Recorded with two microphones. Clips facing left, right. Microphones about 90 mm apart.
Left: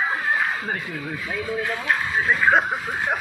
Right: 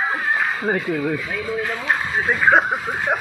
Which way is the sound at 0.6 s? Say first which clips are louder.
Right 8 dB; 35° right (ahead or behind).